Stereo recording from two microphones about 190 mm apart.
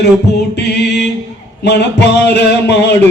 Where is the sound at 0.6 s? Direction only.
60° left (ahead or behind).